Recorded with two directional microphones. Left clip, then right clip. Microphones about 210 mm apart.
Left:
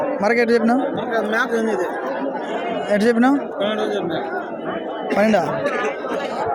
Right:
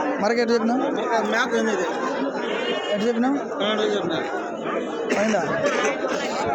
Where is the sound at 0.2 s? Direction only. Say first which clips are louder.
Left 5 dB; 5° left (ahead or behind).